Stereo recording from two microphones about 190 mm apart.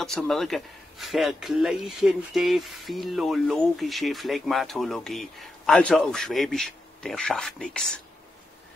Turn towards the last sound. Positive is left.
turn(degrees=5)  # may be behind; listen again after turning